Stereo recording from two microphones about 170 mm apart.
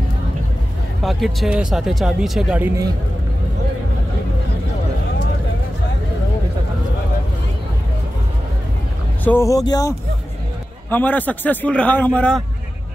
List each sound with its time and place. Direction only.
1.0 s speech: centre (ahead or behind)
9.2 s speech: 15° left (ahead or behind)
10.9 s a man's voice: 10° left (ahead or behind)